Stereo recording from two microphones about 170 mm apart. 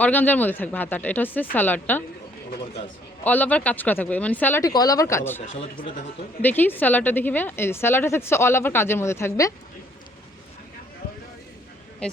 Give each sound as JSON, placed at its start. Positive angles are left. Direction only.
{"t": 0.0, "sound": "a woman's voice", "side_deg": 10}
{"t": 3.2, "sound": "a woman's voice", "side_deg": 10}
{"t": 5.5, "sound": "speech", "side_deg": 30}
{"t": 6.4, "sound": "a woman's voice", "side_deg": 10}